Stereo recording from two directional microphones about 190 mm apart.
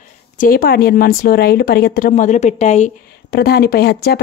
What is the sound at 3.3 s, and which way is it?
Speech, 55° left (ahead or behind).